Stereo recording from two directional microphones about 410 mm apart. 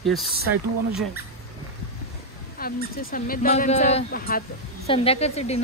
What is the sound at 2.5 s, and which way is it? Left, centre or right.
Speech, left.